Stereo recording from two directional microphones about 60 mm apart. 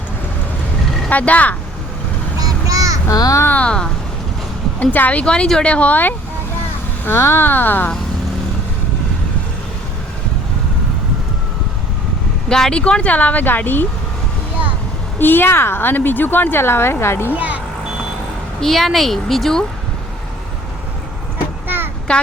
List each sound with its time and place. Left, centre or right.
1.1 s speech: left
2.4 s a sound: right
3.1 s a child's voice: left
3.5 s speech: centre
5.2 s speech: centre
7.0 s speech: left
12.5 s speech: centre; by 13.8 s left
15.2 s speech: left
17.3 s speech: right
18.6 s speech: centre
22.1 s speech: centre